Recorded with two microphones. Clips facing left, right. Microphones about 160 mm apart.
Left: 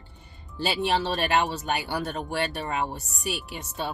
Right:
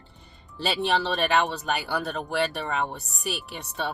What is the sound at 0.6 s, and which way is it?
Speech, centre (ahead or behind).